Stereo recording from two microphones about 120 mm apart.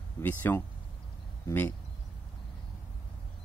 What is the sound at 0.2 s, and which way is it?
Speech, 15° left (ahead or behind).